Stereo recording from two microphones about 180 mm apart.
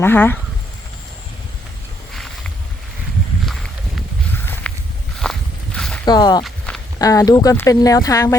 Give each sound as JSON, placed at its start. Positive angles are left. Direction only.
{"t": 0.0, "sound": "speech", "side_deg": 10}
{"t": 3.4, "sound": "a sound", "side_deg": 0}
{"t": 4.7, "sound": "walk", "side_deg": 5}
{"t": 5.2, "sound": "a sound", "side_deg": 5}
{"t": 6.1, "sound": "speech", "side_deg": 25}
{"t": 6.4, "sound": "walk", "side_deg": 5}
{"t": 7.0, "sound": "speech", "side_deg": 20}